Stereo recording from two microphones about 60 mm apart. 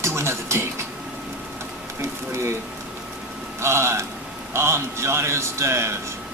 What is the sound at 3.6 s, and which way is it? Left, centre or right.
Speech, right.